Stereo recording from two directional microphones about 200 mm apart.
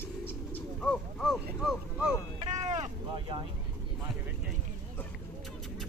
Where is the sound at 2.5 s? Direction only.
35° right (ahead or behind).